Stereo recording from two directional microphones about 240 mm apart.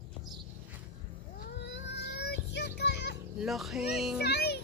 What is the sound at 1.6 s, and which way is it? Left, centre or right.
Child singing, left.